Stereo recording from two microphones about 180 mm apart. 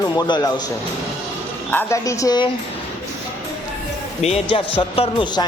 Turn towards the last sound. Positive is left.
turn(degrees=30)  # may be behind; listen again after turning